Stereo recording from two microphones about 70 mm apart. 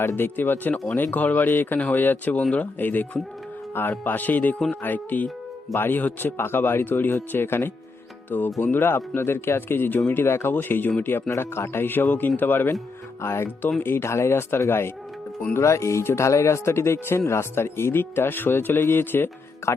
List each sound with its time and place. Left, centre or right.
0.0 s speech: left
8.3 s speech: left
8.7 s speech: left